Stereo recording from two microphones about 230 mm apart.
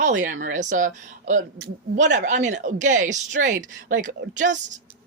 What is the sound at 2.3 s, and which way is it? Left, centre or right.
A woman's voice, right.